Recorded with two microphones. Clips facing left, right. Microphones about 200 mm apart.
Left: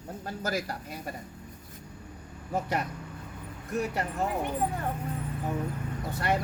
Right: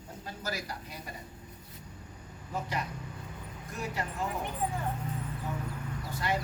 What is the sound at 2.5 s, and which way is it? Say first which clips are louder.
Speech: left 5 dB; 55° left (ahead or behind).